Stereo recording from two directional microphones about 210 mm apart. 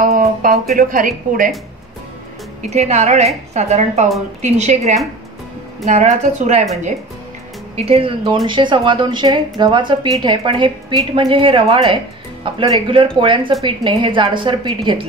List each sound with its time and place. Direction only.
0.0 s a sound: 40° right (ahead or behind)
0.7 s a woman's voice: 40° right (ahead or behind)
2.7 s a woman's voice: 30° right (ahead or behind)
7.7 s speech: 30° right (ahead or behind)